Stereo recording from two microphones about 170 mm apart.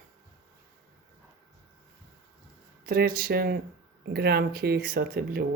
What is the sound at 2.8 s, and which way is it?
Speech, 65° right (ahead or behind).